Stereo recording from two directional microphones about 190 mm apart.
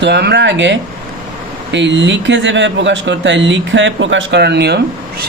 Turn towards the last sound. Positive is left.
turn(degrees=-60)  # may be behind; listen again after turning